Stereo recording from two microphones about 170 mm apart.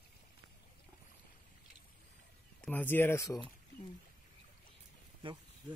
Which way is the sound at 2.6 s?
10° left (ahead or behind).